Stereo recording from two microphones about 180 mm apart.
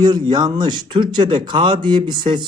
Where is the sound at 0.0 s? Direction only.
25° right (ahead or behind).